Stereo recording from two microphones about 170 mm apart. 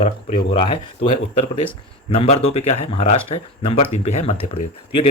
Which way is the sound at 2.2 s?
40° left (ahead or behind).